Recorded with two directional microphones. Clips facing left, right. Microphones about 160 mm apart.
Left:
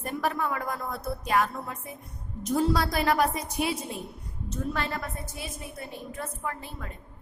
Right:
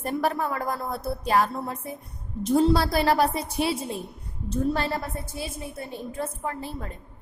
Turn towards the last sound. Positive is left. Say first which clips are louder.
# right 4 dB
turn(degrees=-35)  # may be behind; listen again after turning